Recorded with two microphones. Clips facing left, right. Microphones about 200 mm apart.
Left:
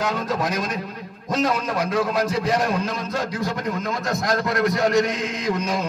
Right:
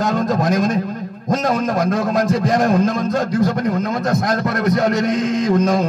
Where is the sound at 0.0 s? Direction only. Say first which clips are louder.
Right 6 dB; 45° right (ahead or behind).